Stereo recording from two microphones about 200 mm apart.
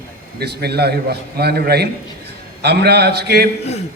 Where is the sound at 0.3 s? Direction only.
55° right (ahead or behind).